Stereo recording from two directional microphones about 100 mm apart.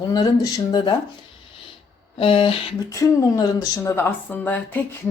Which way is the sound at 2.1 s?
70° left (ahead or behind).